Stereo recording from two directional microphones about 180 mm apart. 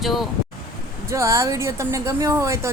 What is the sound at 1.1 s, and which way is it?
A woman's voice, 15° right (ahead or behind).